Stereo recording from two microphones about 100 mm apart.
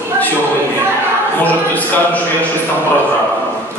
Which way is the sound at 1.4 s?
15° left (ahead or behind).